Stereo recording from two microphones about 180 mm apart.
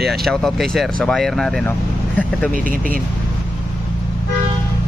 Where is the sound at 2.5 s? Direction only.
50° right (ahead or behind).